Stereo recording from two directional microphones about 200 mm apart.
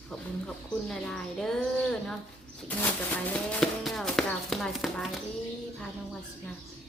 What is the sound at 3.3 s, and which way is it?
Speech, 5° left (ahead or behind).